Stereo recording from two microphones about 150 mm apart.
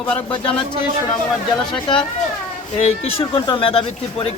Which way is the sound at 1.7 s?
35° left (ahead or behind).